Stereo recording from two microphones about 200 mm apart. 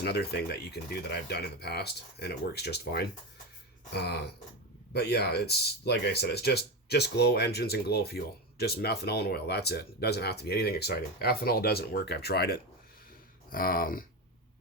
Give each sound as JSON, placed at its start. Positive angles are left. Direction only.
{"t": 0.0, "sound": "speech", "side_deg": 55}